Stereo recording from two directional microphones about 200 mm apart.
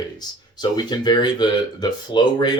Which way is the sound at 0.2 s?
20° left (ahead or behind).